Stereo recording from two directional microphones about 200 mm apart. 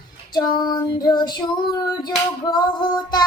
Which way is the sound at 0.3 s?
20° left (ahead or behind).